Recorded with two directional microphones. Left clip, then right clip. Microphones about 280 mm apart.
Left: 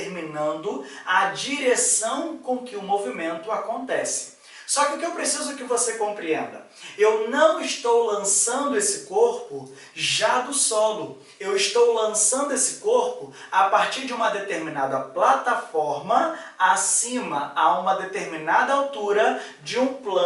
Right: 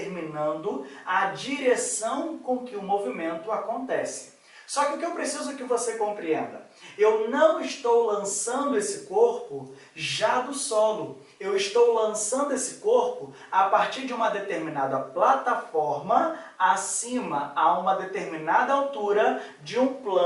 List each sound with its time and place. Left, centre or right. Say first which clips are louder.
0.1 s a sound: left 2 dB; centre
0.6 s speech: left 2 dB; right
1.0 s speech: left 4 dB; centre
7.9 s speech: left 2 dB; centre
10.2 s speech: left 2 dB; centre
11.4 s speech: left 2 dB; centre
12.9 s speech: left 1 dB; right
13.5 s speech: left 2 dB; centre
15.7 s speech: left 1 dB; centre